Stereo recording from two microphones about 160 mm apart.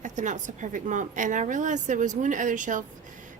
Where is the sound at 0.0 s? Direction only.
50° right (ahead or behind).